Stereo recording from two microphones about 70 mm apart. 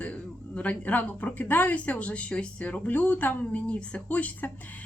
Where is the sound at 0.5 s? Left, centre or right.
Left.